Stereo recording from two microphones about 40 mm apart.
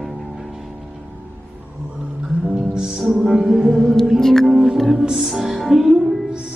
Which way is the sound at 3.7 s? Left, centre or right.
Centre.